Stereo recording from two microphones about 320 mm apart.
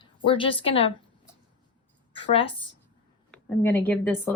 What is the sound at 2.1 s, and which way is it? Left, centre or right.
Speech, centre.